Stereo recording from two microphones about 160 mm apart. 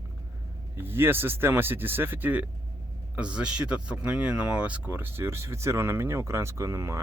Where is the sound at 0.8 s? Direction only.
15° right (ahead or behind).